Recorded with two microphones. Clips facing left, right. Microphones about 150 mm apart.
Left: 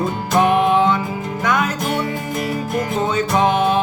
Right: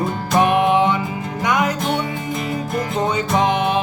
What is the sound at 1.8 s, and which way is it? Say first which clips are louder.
Music: even; 5° left (ahead or behind).